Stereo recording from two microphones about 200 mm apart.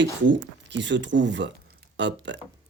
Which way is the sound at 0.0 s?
65° right (ahead or behind).